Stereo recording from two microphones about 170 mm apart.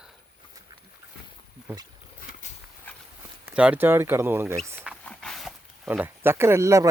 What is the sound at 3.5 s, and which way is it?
Speech, 10° right (ahead or behind).